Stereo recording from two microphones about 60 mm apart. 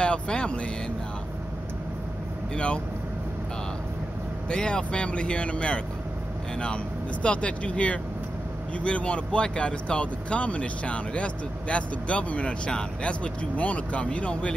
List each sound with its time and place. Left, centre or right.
0.0 s speech: centre
2.5 s speech: centre
4.5 s speech: centre